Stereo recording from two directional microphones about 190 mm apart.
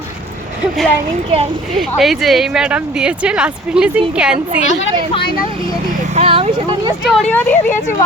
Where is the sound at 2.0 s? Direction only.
Centre (ahead or behind).